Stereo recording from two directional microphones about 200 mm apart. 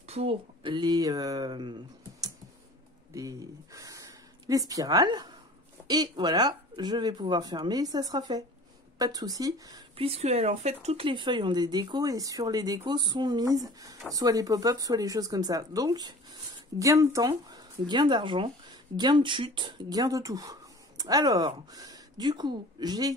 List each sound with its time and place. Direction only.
0.0 s speech: 30° right (ahead or behind)